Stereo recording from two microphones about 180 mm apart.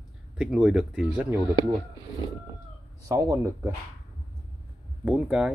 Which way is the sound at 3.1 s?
20° right (ahead or behind).